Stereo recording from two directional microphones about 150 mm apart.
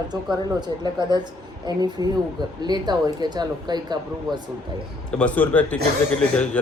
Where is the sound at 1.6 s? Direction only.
30° right (ahead or behind).